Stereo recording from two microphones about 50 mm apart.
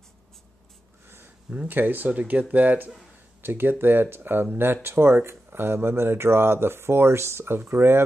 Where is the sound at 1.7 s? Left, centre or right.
Right.